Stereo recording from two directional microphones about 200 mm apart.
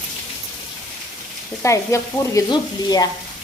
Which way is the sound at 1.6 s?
15° left (ahead or behind).